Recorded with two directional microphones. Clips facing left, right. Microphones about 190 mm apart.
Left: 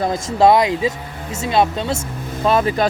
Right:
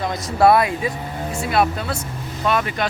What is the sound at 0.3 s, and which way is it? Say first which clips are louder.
Speech: left 1 dB; 20° left (ahead or behind).